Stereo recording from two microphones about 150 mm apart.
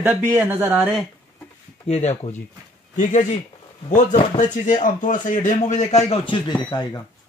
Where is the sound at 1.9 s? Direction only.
45° left (ahead or behind).